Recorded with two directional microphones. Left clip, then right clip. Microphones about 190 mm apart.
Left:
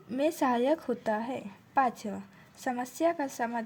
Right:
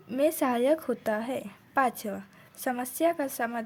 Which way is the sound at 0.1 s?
15° right (ahead or behind).